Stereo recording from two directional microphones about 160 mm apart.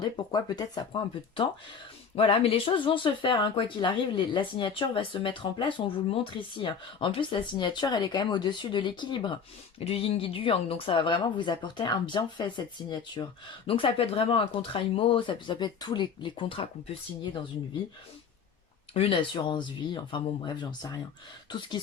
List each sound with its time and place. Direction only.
0.0 s speech: 25° left (ahead or behind)
2.1 s speech: 35° left (ahead or behind)
18.9 s speech: 35° left (ahead or behind)